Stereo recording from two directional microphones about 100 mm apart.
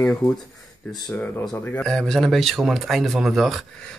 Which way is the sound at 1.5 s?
20° left (ahead or behind).